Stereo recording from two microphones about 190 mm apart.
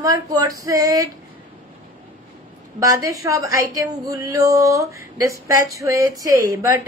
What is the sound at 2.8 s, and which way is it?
Speech, 15° right (ahead or behind).